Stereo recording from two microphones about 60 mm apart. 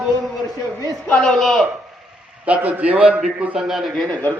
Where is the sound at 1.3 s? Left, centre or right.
Centre.